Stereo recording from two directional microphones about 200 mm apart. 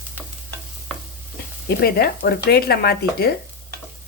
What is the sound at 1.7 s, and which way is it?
Speech, 55° left (ahead or behind).